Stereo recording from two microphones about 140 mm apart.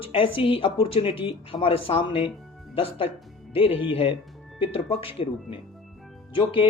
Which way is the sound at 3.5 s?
40° left (ahead or behind).